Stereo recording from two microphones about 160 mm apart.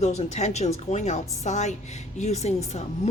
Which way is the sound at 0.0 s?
45° left (ahead or behind).